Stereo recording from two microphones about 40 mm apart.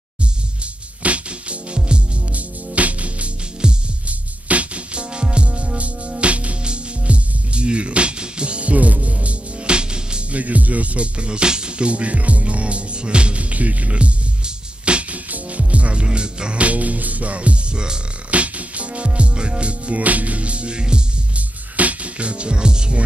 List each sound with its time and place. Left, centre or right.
1.0 s music: right
3.6 s music: right
4.5 s music: right
10.3 s music: right
21.4 s music: right